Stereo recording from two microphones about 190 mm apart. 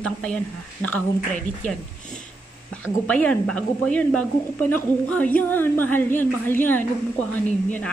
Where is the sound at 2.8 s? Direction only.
10° left (ahead or behind).